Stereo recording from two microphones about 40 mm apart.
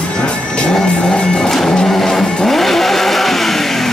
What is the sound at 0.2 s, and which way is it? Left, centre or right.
Music, left.